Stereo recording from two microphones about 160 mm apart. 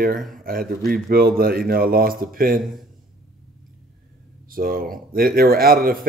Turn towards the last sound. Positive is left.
turn(degrees=-65)  # may be behind; listen again after turning